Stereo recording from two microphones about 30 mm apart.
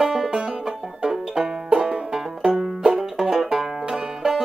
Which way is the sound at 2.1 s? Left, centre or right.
Centre.